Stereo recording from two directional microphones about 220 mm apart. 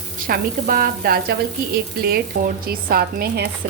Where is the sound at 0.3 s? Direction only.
40° right (ahead or behind).